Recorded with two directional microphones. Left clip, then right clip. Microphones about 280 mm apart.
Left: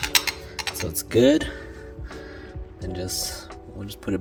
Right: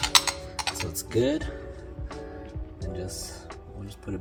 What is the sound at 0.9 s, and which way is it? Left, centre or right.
Speech, left.